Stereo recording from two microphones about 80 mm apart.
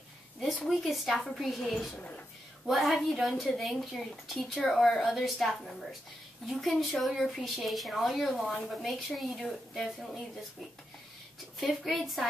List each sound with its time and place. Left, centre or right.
0.4 s a sound: centre
0.8 s a woman's voice: centre
2.0 s speech: centre
2.6 s a woman's voice: centre
11.6 s a woman's voice: centre